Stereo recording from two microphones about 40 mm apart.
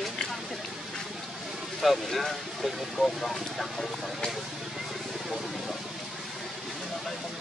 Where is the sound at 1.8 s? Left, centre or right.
Centre.